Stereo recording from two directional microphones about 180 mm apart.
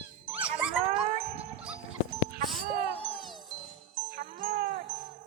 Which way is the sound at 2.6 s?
55° right (ahead or behind).